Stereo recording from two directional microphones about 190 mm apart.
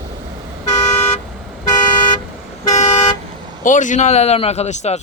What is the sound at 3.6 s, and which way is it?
Speech, 40° left (ahead or behind).